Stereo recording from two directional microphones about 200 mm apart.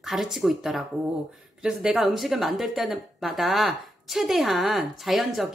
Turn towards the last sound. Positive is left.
turn(degrees=0)  # may be behind; listen again after turning